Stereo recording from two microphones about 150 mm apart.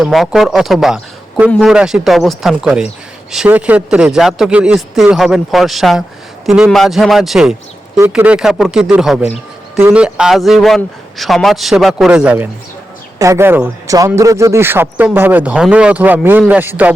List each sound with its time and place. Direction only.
0.0 s a man's voice: 5° right (ahead or behind)
13.1 s speech: 20° right (ahead or behind)